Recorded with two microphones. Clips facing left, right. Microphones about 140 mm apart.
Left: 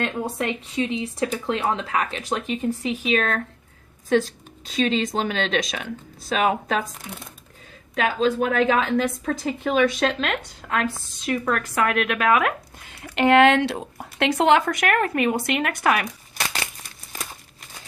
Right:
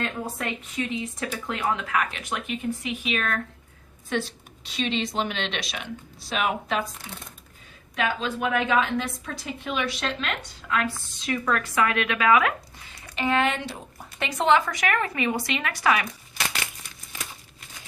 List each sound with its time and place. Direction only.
0.0 s speech: 25° left (ahead or behind)
4.8 s speech: 40° left (ahead or behind)
7.9 s a woman's voice: 40° left (ahead or behind)
13.0 s speech: 70° left (ahead or behind); by 16.0 s 55° left (ahead or behind)
17.1 s crumpling: 40° left (ahead or behind)